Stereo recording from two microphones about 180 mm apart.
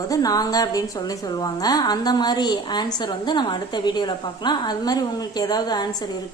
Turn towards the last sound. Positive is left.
turn(degrees=20)  # may be behind; listen again after turning